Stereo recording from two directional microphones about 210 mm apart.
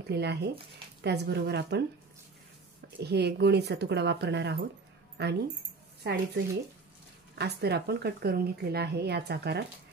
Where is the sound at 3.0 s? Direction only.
50° right (ahead or behind).